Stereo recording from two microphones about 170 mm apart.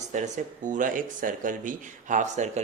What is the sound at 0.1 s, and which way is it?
Speech, 45° right (ahead or behind).